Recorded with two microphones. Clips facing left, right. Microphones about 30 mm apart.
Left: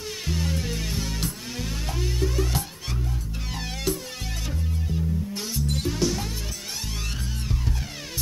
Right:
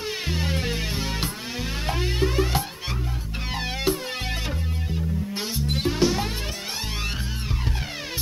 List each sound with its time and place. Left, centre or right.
0.3 s music: right